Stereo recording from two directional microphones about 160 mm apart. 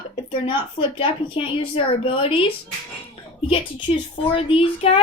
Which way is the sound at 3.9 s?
45° left (ahead or behind).